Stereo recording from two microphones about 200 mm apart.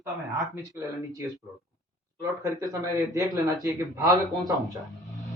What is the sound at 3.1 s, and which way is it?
Speech, 20° right (ahead or behind).